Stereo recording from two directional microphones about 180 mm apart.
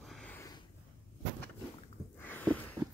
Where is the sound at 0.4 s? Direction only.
20° left (ahead or behind).